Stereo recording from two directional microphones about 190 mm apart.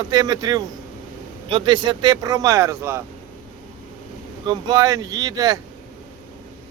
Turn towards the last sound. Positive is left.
turn(degrees=-20)  # may be behind; listen again after turning